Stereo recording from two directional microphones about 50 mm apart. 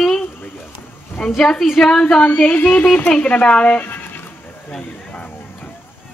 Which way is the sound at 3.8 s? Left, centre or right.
Left.